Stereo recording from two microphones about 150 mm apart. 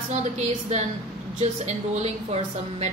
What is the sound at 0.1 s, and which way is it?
Speech, 50° right (ahead or behind).